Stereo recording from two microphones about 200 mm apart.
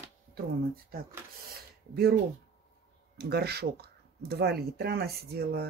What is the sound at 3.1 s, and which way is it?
Speech, 55° right (ahead or behind).